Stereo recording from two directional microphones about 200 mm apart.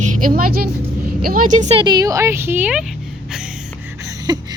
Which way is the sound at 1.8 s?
20° right (ahead or behind).